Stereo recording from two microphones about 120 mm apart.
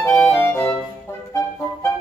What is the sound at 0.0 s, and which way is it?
Clarinet, 20° left (ahead or behind).